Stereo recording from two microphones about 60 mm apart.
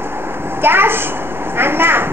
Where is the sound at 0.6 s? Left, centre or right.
Right.